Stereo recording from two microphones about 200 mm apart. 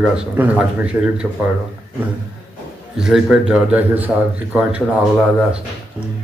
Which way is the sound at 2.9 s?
5° right (ahead or behind).